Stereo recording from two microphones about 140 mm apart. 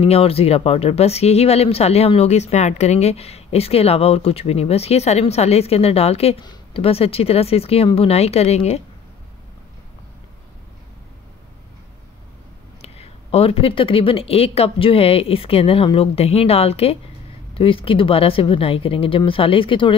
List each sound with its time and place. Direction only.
0.0 s speech: 45° left (ahead or behind)
12.8 s speech: 45° left (ahead or behind)